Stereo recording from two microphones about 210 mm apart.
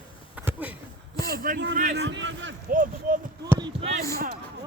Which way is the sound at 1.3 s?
45° right (ahead or behind).